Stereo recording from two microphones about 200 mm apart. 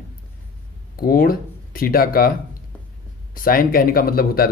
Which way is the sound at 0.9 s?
45° left (ahead or behind).